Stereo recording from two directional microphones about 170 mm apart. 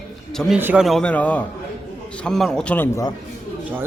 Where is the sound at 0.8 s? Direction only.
5° left (ahead or behind).